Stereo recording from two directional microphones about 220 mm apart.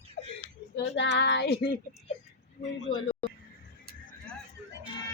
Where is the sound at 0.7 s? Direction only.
50° left (ahead or behind).